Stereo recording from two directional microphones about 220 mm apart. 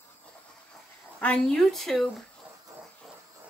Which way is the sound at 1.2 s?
5° left (ahead or behind).